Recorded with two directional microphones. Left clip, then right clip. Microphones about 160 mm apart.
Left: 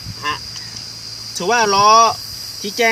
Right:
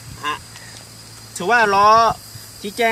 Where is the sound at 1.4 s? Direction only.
5° right (ahead or behind).